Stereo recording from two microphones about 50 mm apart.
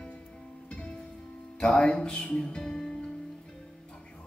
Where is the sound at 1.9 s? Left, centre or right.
Centre.